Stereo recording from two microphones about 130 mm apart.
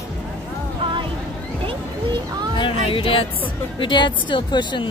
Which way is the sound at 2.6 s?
45° left (ahead or behind).